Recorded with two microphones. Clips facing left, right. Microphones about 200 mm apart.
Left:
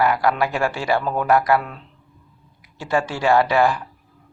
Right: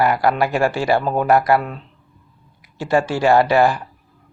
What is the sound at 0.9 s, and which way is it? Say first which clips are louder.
Speech: right 3 dB; 30° right (ahead or behind).